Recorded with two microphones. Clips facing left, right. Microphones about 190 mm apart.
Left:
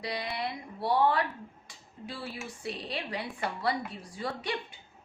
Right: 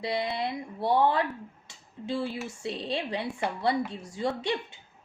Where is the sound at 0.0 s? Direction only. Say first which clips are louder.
Right 5 dB; 25° right (ahead or behind).